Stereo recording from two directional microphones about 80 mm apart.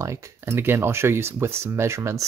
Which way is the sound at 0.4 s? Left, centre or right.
Right.